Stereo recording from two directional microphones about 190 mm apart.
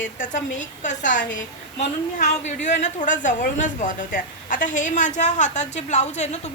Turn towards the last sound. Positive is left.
turn(degrees=35)  # may be behind; listen again after turning